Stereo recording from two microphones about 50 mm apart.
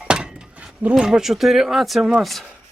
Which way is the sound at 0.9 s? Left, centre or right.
Centre.